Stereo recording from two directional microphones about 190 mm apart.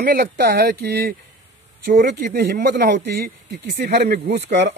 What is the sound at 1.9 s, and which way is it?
Speech, 45° right (ahead or behind).